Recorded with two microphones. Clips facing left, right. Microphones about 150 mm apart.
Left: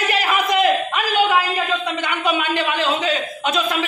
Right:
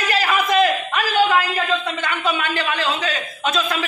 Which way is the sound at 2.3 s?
20° left (ahead or behind).